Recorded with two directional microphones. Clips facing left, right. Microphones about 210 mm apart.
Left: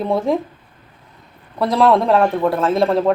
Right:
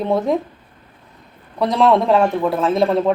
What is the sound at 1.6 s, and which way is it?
A man's voice, centre (ahead or behind).